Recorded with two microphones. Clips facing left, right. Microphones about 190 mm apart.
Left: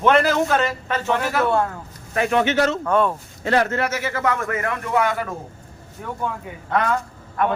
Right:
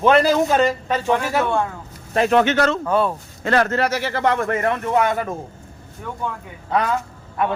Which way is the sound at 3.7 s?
35° right (ahead or behind).